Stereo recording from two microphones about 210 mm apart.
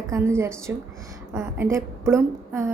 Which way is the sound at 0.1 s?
10° right (ahead or behind).